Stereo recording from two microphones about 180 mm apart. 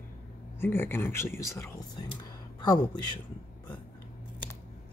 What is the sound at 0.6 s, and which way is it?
A man's voice, 10° left (ahead or behind).